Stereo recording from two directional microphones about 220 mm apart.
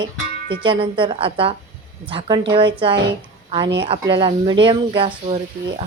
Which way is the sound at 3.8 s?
20° right (ahead or behind).